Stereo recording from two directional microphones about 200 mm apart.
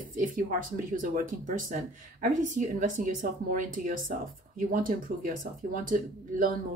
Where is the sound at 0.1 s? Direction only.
45° right (ahead or behind).